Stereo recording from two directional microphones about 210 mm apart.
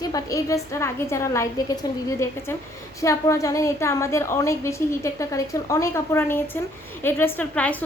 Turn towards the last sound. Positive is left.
turn(degrees=5)  # may be behind; listen again after turning